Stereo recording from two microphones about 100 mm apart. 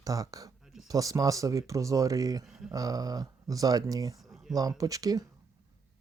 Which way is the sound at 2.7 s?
35° right (ahead or behind).